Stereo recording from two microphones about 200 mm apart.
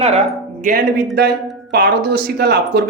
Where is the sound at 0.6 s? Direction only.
50° right (ahead or behind).